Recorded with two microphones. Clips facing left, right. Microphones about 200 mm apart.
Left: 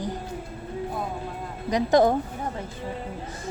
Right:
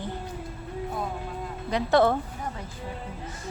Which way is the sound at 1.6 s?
15° left (ahead or behind).